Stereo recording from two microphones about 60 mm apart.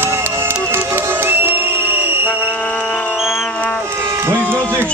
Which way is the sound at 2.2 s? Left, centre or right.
Left.